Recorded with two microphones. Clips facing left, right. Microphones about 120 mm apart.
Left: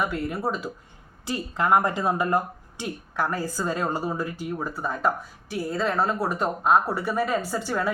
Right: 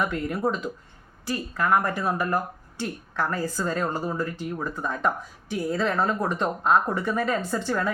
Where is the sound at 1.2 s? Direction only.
20° left (ahead or behind).